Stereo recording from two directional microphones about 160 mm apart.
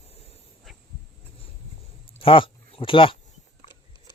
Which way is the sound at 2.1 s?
35° left (ahead or behind).